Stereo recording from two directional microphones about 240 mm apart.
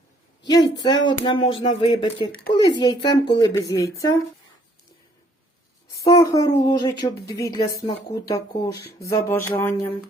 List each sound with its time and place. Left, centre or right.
0.4 s speech: centre
6.1 s speech: centre